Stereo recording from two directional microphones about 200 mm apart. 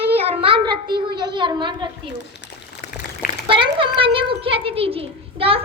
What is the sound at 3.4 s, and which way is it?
A child's voice, 25° right (ahead or behind).